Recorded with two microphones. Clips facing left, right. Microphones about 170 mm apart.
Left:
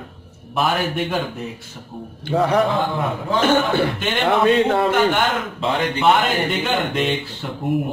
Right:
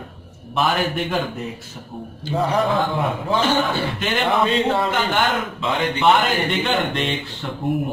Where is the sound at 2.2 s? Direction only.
60° left (ahead or behind).